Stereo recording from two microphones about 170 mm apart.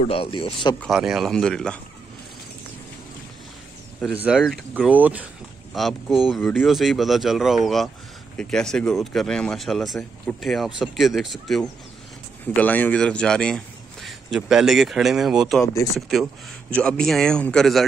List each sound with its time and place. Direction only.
0.1 s speech: 30° left (ahead or behind)
0.7 s speech: centre (ahead or behind)
4.2 s speech: 5° right (ahead or behind)
15.6 s speech: 20° left (ahead or behind)
16.7 s speech: 5° left (ahead or behind)